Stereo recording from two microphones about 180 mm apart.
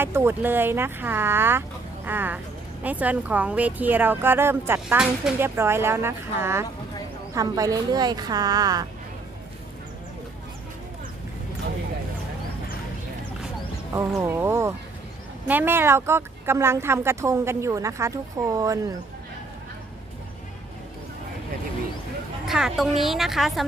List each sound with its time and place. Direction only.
0.0 s a woman's voice: 15° right (ahead or behind)
14.2 s speech: 10° right (ahead or behind)
22.4 s a woman's voice: centre (ahead or behind)